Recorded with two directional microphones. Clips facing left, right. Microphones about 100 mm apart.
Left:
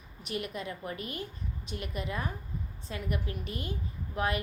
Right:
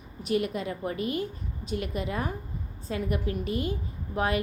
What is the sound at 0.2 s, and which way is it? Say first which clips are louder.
Speech: right 8 dB; 35° right (ahead or behind).